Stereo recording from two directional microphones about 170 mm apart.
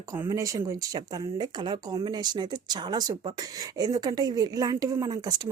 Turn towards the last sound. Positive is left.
turn(degrees=-25)  # may be behind; listen again after turning